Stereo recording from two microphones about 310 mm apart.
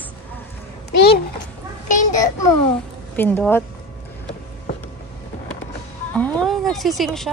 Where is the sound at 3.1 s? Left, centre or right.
Centre.